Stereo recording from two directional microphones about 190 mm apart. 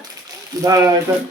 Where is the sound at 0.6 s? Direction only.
15° right (ahead or behind).